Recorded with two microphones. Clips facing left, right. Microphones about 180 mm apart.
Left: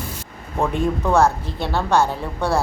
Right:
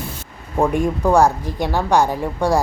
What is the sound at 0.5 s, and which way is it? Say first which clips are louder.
A woman's voice: right 3 dB; 15° right (ahead or behind).